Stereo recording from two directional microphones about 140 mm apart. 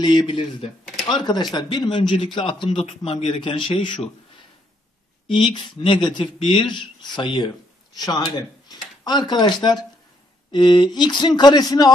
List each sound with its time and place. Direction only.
0.0 s speech: 35° left (ahead or behind)
5.3 s speech: 40° left (ahead or behind)